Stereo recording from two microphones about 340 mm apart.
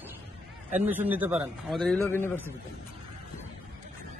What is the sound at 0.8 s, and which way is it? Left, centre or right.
A man's voice, centre.